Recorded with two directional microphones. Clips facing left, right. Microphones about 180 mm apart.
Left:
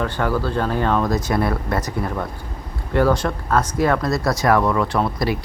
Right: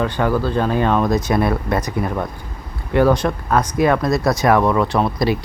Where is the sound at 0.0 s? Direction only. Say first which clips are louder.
Right 3 dB; 15° right (ahead or behind).